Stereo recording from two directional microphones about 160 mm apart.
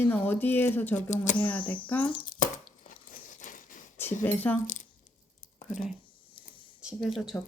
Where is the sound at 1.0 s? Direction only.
50° left (ahead or behind).